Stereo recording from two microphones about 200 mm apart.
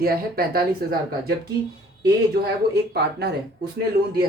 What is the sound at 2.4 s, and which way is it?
Speech, 50° right (ahead or behind).